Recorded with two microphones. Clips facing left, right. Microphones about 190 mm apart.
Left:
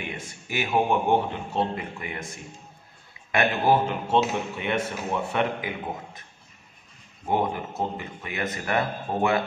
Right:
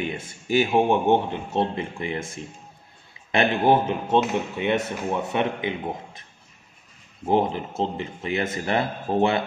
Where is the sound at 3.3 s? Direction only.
25° right (ahead or behind).